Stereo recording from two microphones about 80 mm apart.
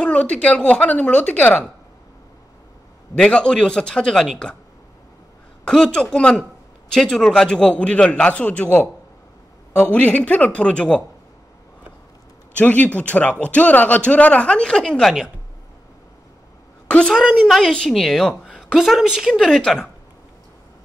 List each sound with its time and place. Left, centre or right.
0.0 s speech: centre
3.2 s speech: centre
5.7 s speech: centre
9.8 s speech: centre
12.5 s speech: centre
17.1 s a woman's voice: centre
17.5 s a woman's voice: centre
19.4 s speech: centre